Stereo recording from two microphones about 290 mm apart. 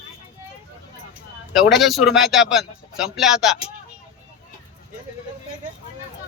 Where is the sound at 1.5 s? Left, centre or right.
Centre.